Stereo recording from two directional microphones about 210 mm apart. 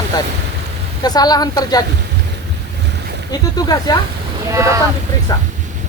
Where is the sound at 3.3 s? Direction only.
20° left (ahead or behind).